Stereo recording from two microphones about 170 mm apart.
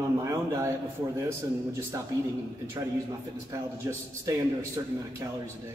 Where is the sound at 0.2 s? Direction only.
20° right (ahead or behind).